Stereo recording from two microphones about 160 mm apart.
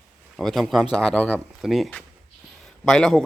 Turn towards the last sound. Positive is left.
turn(degrees=5)  # may be behind; listen again after turning